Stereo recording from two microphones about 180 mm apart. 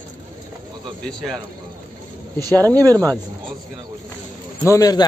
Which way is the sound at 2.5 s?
20° right (ahead or behind).